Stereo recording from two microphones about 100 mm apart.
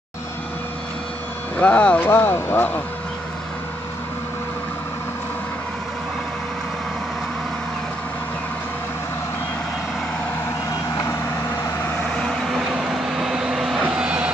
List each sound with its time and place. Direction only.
1.6 s speech: 15° left (ahead or behind)
12.2 s vehicle: 5° left (ahead or behind)